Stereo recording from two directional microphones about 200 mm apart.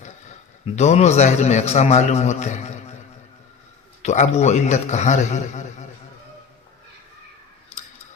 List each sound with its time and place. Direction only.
0.0 s a man's voice: 35° left (ahead or behind)
4.0 s a man's voice: 35° left (ahead or behind)